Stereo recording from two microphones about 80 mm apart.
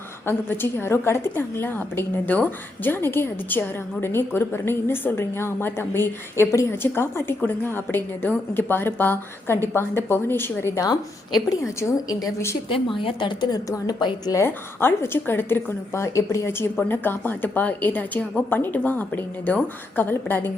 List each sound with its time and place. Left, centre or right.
0.3 s a woman's voice: left
10.8 s a woman's voice: left
11.8 s a woman's voice: left
12.6 s a woman's voice: left
13.7 s a woman's voice: left
14.4 s a woman's voice: left